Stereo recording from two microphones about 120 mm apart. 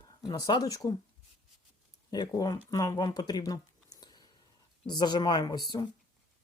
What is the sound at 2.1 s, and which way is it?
Speech, 30° left (ahead or behind).